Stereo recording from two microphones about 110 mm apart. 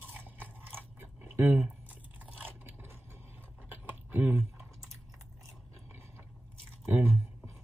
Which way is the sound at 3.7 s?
15° right (ahead or behind).